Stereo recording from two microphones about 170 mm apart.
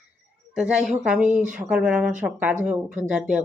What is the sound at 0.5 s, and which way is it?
A woman's voice, 5° right (ahead or behind).